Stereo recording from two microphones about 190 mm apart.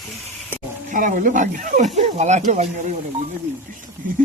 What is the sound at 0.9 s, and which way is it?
Speech, 40° right (ahead or behind).